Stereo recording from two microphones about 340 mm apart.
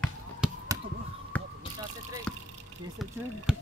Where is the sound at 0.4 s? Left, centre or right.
Centre.